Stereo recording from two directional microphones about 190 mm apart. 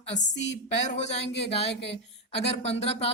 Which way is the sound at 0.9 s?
35° left (ahead or behind).